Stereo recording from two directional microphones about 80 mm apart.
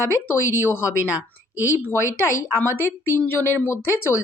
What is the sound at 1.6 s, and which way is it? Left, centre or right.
A woman's voice, left.